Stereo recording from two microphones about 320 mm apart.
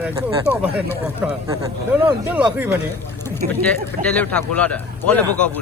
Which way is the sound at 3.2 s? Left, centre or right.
Centre.